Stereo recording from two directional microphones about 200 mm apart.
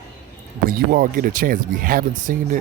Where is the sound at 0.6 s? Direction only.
45° right (ahead or behind).